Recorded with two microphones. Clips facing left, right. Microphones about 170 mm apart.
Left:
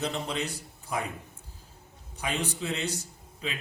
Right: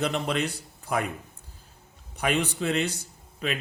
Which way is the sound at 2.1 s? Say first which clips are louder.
Right 6 dB; 65° right (ahead or behind).